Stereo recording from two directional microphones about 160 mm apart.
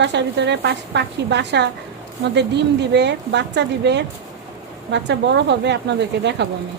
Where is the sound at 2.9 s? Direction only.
90° right.